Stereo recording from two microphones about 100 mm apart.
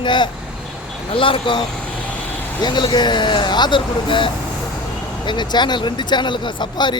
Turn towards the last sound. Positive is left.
turn(degrees=50)  # may be behind; listen again after turning